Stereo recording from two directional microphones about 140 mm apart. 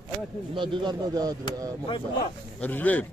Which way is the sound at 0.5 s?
35° right (ahead or behind).